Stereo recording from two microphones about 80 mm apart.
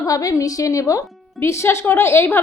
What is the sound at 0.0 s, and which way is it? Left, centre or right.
A woman's voice, left.